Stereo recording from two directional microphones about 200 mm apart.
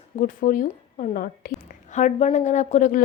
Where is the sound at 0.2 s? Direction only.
40° left (ahead or behind).